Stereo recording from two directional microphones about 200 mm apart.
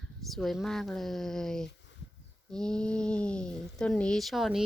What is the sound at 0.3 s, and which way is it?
Speech, centre (ahead or behind).